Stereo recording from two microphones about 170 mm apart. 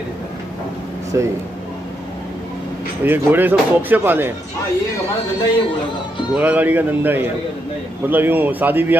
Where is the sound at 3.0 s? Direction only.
10° right (ahead or behind).